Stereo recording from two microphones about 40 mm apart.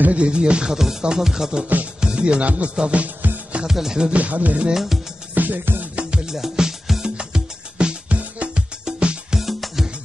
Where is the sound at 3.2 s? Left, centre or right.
Right.